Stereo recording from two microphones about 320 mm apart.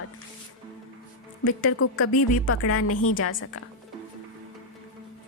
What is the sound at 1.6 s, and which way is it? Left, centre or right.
A woman's voice, left.